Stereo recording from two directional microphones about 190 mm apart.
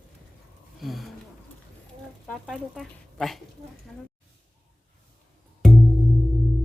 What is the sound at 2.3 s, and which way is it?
Speech, centre (ahead or behind).